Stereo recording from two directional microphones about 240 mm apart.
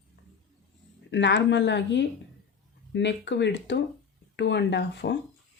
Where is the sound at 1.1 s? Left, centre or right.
Left.